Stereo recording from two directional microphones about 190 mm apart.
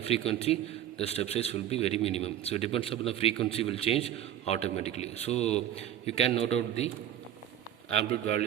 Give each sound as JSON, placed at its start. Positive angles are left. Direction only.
{"t": 0.0, "sound": "a man's voice", "side_deg": 30}